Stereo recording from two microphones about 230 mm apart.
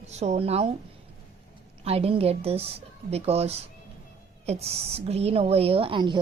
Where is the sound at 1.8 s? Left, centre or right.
Right.